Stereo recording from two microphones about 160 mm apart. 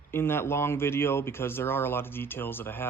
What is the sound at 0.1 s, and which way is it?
Speech, 15° left (ahead or behind).